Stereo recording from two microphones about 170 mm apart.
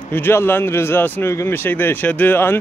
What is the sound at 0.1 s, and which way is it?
Speech, 15° left (ahead or behind).